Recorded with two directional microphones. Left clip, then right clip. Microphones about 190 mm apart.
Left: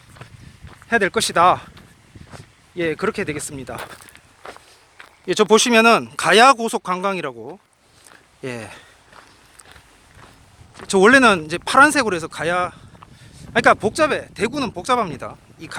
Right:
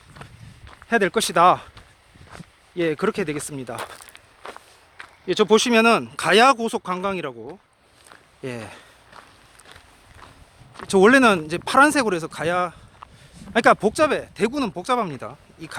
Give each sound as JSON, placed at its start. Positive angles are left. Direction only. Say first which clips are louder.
{"t": 0.2, "sound": "walk", "louder": "even", "side_deg": -5}
{"t": 0.9, "sound": "speech", "louder": "left 2 dB", "side_deg": -15}
{"t": 2.7, "sound": "speech", "louder": "left 1 dB", "side_deg": -15}
{"t": 3.9, "sound": "speech", "louder": "left 1 dB", "side_deg": -5}
{"t": 8.1, "sound": "walk", "louder": "left 2 dB", "side_deg": 0}
{"t": 10.8, "sound": "speech", "louder": "left 2 dB", "side_deg": -5}